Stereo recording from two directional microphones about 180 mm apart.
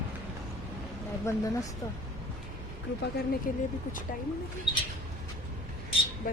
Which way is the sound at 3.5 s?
50° left (ahead or behind).